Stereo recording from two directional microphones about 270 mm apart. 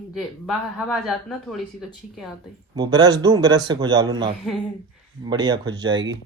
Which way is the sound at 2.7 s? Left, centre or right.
Centre.